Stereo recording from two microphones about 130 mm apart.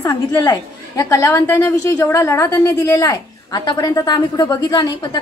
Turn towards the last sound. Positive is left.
turn(degrees=30)  # may be behind; listen again after turning